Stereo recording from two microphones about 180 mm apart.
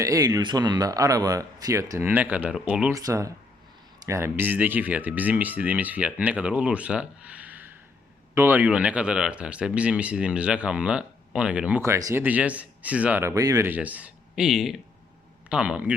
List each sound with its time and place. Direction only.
0.0 s speech: 20° right (ahead or behind)
2.9 s speech: 15° right (ahead or behind)